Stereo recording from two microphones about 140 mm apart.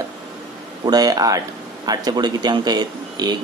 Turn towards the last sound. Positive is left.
turn(degrees=-30)  # may be behind; listen again after turning